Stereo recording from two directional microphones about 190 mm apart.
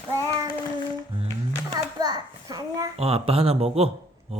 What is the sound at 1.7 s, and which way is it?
Hands, 20° right (ahead or behind).